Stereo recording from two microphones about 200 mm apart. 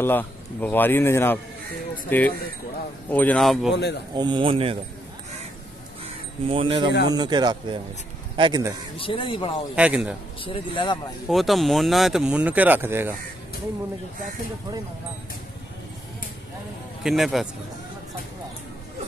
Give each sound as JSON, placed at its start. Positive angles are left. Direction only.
{"t": 0.0, "sound": "speech", "side_deg": 10}
{"t": 3.7, "sound": "a man's voice", "side_deg": 55}
{"t": 4.1, "sound": "speech", "side_deg": -20}
{"t": 6.4, "sound": "speech", "side_deg": -25}
{"t": 8.9, "sound": "speech", "side_deg": 25}
{"t": 9.8, "sound": "speech", "side_deg": -5}
{"t": 10.4, "sound": "speech", "side_deg": 25}
{"t": 11.2, "sound": "speech", "side_deg": 0}
{"t": 17.0, "sound": "speech", "side_deg": 0}